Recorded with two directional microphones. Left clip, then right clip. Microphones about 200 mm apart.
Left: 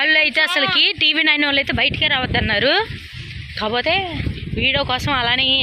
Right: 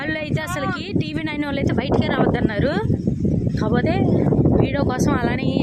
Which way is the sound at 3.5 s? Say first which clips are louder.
Left 5 dB; 15° right (ahead or behind).